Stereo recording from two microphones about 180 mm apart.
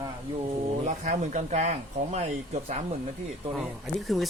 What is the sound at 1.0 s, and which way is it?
Speech, 40° right (ahead or behind).